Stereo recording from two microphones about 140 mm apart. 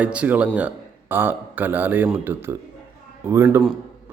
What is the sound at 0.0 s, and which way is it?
Speech, 10° right (ahead or behind).